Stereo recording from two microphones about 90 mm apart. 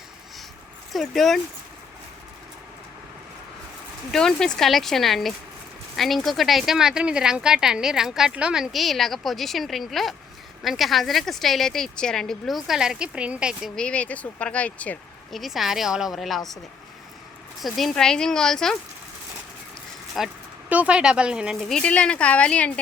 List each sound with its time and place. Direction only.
0.9 s speech: 5° left (ahead or behind)
4.1 s speech: 5° left (ahead or behind); by 13.6 s 10° right (ahead or behind)
13.7 s speech: 10° left (ahead or behind)
15.3 s speech: centre (ahead or behind)
17.6 s speech: centre (ahead or behind)
20.2 s speech: centre (ahead or behind)
20.7 s speech: 15° right (ahead or behind)
21.8 s speech: 10° left (ahead or behind)